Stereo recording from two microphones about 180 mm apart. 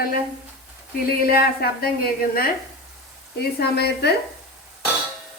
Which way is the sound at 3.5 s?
65° left (ahead or behind).